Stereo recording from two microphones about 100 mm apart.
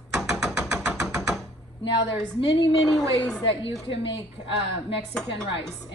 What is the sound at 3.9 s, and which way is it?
Speech, 65° left (ahead or behind).